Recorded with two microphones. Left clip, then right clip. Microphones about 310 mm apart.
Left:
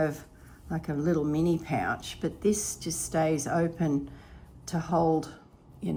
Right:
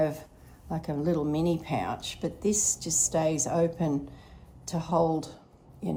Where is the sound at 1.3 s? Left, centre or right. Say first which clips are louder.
Even; centre.